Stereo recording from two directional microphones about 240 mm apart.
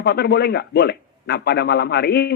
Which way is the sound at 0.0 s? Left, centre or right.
Left.